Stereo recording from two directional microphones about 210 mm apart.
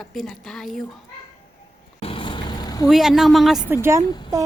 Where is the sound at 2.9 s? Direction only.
Centre (ahead or behind).